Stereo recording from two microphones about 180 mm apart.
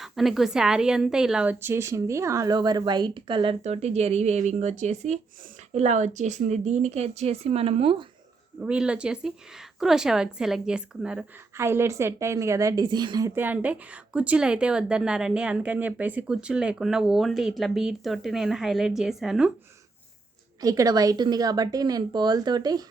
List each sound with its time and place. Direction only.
0.0 s a woman's voice: centre (ahead or behind); by 8.0 s 30° right (ahead or behind)
8.6 s a woman's voice: 5° right (ahead or behind)
20.6 s a woman's voice: 20° right (ahead or behind)